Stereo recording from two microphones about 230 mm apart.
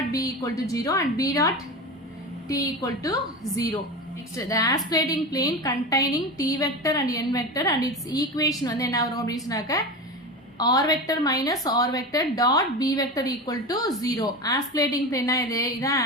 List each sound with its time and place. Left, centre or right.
0.1 s a woman's voice: centre